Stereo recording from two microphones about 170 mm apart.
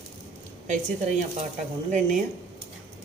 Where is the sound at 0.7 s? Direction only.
40° right (ahead or behind).